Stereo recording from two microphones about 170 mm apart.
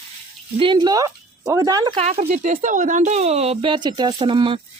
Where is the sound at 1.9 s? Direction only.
35° right (ahead or behind).